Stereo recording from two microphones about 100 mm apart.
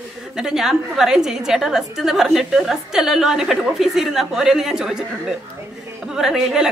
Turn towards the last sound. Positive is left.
turn(degrees=-5)  # may be behind; listen again after turning